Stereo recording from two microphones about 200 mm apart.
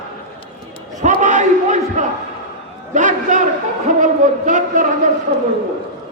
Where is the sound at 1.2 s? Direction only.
40° right (ahead or behind).